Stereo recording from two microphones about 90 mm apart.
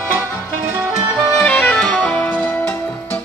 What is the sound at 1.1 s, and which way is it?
Music, centre (ahead or behind).